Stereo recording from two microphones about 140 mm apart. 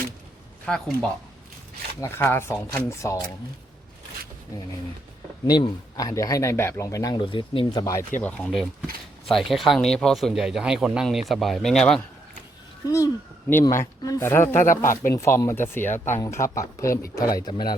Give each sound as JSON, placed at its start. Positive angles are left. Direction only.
{"t": 0.6, "sound": "speech", "side_deg": 5}
{"t": 2.0, "sound": "speech", "side_deg": 15}
{"t": 5.5, "sound": "a man's voice", "side_deg": 30}
{"t": 8.2, "sound": "speech", "side_deg": 5}
{"t": 12.8, "sound": "a man's voice", "side_deg": 25}